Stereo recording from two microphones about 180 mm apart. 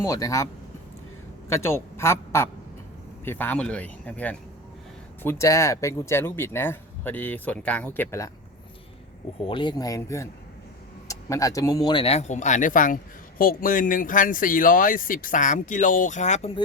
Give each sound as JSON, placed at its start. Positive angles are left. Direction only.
{"t": 0.0, "sound": "speech", "side_deg": 15}
{"t": 1.5, "sound": "a woman's voice", "side_deg": 15}
{"t": 9.4, "sound": "speech", "side_deg": 25}